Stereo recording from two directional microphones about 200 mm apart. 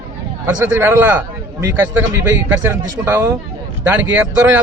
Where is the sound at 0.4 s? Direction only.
10° right (ahead or behind).